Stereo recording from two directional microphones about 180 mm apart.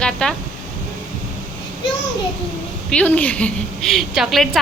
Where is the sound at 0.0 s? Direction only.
5° left (ahead or behind).